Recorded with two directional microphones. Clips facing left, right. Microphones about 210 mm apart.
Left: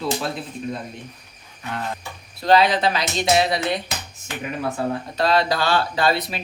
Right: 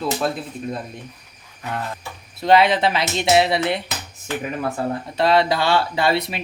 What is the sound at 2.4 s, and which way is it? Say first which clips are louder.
Speech: right 1 dB; 25° right (ahead or behind).